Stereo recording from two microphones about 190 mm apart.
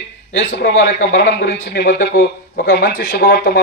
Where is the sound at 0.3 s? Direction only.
70° left (ahead or behind).